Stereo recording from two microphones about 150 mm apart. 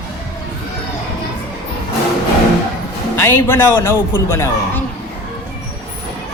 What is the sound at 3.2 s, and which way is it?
A man's voice, 15° left (ahead or behind).